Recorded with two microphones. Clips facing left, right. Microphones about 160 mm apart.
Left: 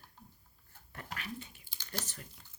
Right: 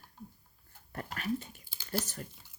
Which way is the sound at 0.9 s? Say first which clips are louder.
Right 8 dB; 45° right (ahead or behind).